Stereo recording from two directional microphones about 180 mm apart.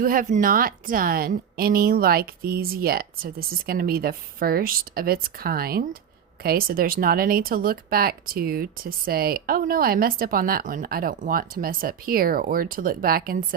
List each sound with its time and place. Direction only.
0.0 s a woman's voice: 50° right (ahead or behind)